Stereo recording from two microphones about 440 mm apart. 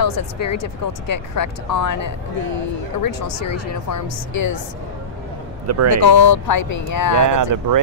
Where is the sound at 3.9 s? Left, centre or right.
Left.